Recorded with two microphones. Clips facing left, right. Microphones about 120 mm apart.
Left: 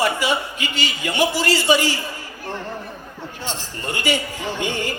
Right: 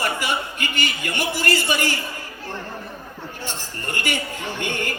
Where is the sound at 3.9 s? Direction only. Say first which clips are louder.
Left 4 dB; 50° right (ahead or behind).